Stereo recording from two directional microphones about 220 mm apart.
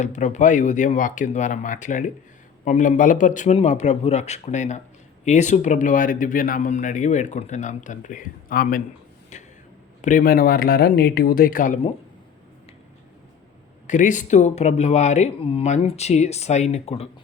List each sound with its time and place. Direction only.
0.0 s speech: 35° left (ahead or behind)
9.3 s a sound: 35° left (ahead or behind)
10.0 s speech: 35° left (ahead or behind)
13.8 s speech: 35° left (ahead or behind)